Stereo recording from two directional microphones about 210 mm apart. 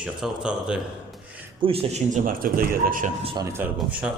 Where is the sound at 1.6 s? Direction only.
25° right (ahead or behind).